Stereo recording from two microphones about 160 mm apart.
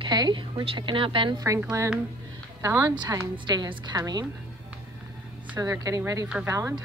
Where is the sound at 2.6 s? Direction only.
20° right (ahead or behind).